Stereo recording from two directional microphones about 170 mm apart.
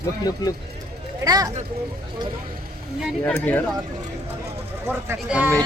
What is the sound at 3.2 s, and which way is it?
Speech, 10° left (ahead or behind).